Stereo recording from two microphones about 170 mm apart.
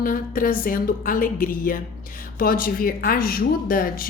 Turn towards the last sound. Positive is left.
turn(degrees=60)  # may be behind; listen again after turning